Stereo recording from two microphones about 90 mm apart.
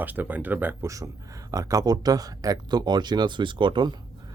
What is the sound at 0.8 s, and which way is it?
A man's voice, 40° right (ahead or behind).